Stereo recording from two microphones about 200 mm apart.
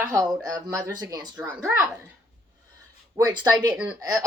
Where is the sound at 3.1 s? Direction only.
20° right (ahead or behind).